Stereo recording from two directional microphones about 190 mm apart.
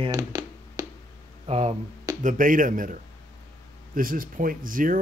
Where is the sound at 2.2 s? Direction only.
45° right (ahead or behind).